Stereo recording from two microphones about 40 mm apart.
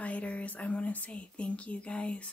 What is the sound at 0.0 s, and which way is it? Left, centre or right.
Speech, left.